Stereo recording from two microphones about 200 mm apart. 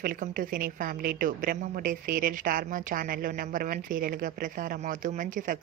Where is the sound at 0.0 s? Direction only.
45° right (ahead or behind).